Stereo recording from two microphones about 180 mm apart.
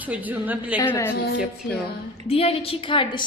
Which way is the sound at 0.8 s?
10° left (ahead or behind).